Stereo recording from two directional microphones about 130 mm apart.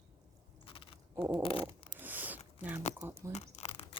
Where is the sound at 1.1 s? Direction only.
10° right (ahead or behind).